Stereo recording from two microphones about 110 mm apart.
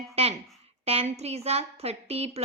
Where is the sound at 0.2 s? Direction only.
65° right (ahead or behind).